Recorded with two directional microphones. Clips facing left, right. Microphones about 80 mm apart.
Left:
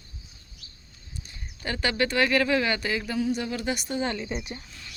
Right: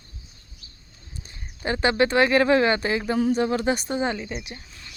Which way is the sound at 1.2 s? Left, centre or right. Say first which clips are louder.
Right 5 dB; right.